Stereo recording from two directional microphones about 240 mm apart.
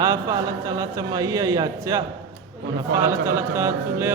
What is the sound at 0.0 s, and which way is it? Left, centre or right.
A man's voice, centre.